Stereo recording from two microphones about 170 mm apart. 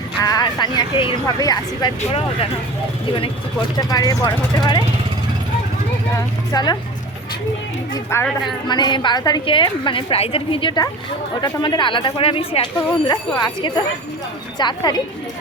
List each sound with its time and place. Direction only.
0.2 s a woman's voice: 20° left (ahead or behind)
2.0 s speech: 35° left (ahead or behind)
3.8 s a woman's voice: 20° left (ahead or behind)
6.5 s a woman's voice: 25° left (ahead or behind)
7.9 s a woman's voice: 15° left (ahead or behind)
8.4 s a woman's voice: 25° left (ahead or behind)